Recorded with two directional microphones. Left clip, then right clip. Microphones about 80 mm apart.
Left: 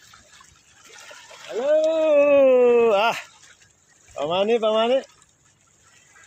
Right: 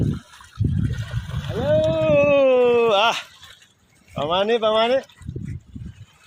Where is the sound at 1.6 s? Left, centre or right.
Right.